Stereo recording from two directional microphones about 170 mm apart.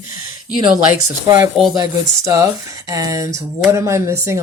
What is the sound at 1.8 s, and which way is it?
Speech, 20° right (ahead or behind).